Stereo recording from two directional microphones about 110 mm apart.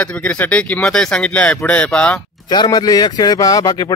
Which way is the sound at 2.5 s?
40° left (ahead or behind).